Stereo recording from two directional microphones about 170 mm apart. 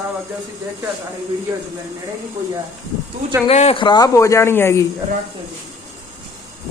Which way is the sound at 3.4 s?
35° left (ahead or behind).